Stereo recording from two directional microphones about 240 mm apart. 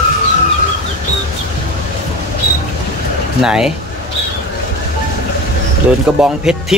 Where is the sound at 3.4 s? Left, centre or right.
Centre.